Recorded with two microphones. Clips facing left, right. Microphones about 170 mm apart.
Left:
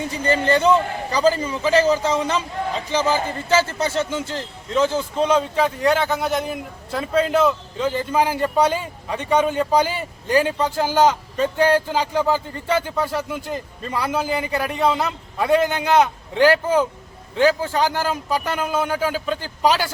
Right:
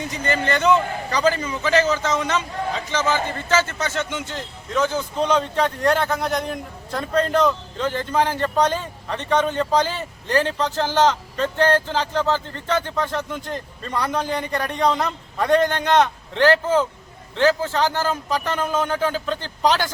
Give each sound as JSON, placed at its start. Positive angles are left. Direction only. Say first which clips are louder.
{"t": 0.1, "sound": "a man's voice", "louder": "left 4 dB", "side_deg": 30}
{"t": 5.1, "sound": "a man's voice", "louder": "even", "side_deg": 5}